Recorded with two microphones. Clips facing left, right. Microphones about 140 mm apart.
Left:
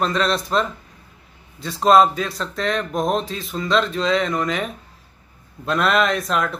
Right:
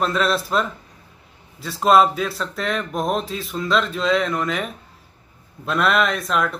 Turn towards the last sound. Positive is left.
turn(degrees=0)  # may be behind; listen again after turning